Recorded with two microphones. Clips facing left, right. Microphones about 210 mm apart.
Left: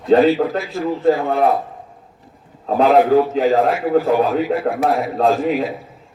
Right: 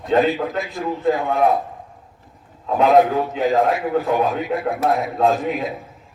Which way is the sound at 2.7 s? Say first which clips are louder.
Left 2 dB; 35° left (ahead or behind).